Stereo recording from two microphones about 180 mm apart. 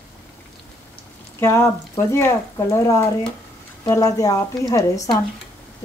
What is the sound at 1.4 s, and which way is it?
A woman's voice, 15° left (ahead or behind).